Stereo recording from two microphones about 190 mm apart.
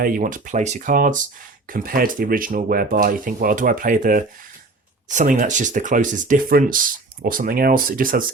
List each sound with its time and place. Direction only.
0.0 s speech: 45° right (ahead or behind)